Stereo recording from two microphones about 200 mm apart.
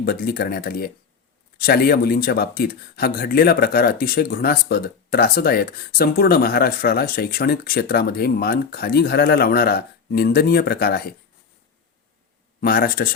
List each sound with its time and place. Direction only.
0.0 s speech: 50° left (ahead or behind)
12.5 s speech: 45° left (ahead or behind)